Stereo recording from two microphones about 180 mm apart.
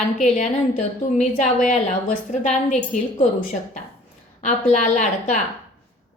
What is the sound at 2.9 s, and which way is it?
A woman's voice, 45° left (ahead or behind).